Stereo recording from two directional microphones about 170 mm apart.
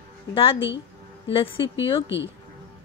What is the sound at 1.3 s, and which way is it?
Speech, 30° left (ahead or behind).